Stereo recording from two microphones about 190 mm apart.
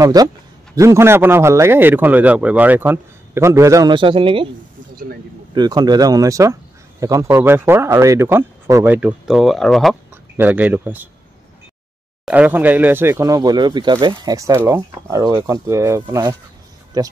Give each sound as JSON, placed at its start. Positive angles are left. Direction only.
{"t": 0.0, "sound": "a man's voice", "side_deg": -20}
{"t": 5.5, "sound": "speech", "side_deg": -20}
{"t": 10.3, "sound": "speech", "side_deg": -10}
{"t": 12.3, "sound": "a man's voice", "side_deg": -10}